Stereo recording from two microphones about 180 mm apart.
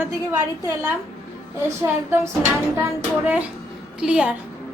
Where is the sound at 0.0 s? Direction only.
15° right (ahead or behind).